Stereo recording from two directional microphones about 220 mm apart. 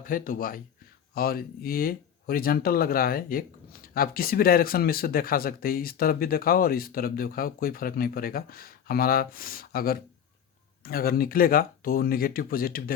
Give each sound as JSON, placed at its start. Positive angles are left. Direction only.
{"t": 0.0, "sound": "speech", "side_deg": 40}